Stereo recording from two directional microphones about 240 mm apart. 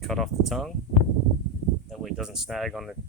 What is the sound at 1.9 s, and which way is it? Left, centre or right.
Speech, centre.